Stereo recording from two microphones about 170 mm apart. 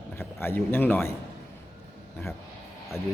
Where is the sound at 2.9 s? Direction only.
15° left (ahead or behind).